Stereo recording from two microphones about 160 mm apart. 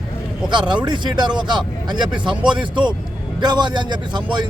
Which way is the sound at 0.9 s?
25° right (ahead or behind).